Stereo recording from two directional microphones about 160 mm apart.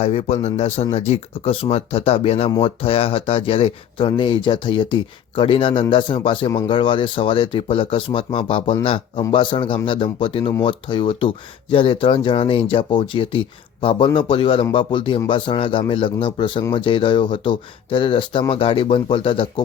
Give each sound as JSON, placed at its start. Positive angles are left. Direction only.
{"t": 0.0, "sound": "speech", "side_deg": 40}